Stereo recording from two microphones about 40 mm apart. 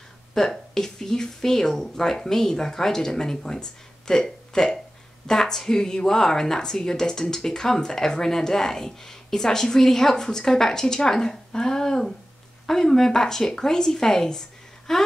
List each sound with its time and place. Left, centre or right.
0.3 s a woman's voice: centre